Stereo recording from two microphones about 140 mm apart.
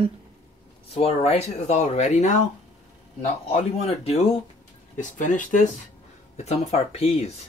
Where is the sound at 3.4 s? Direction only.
45° left (ahead or behind).